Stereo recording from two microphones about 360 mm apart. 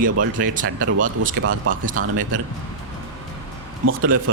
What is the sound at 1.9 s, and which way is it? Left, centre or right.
Speech, right.